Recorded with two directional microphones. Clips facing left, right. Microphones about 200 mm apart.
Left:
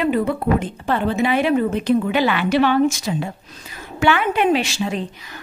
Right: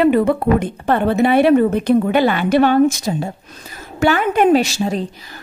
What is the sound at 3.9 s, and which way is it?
A woman's voice, 40° right (ahead or behind).